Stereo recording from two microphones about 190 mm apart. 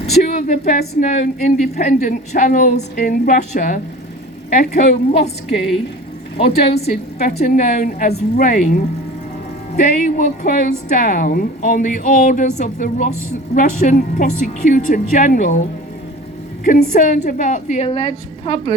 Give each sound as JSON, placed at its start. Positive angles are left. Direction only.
{"t": 0.0, "sound": "a woman's voice", "side_deg": 40}
{"t": 6.3, "sound": "a woman's voice", "side_deg": 55}
{"t": 8.1, "sound": "a woman's voice", "side_deg": 50}
{"t": 16.6, "sound": "a woman's voice", "side_deg": 45}